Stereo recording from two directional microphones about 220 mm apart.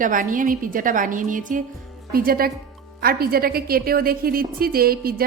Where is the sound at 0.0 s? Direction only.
35° right (ahead or behind).